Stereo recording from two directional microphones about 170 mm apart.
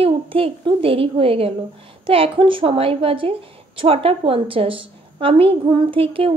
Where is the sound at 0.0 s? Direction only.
30° right (ahead or behind).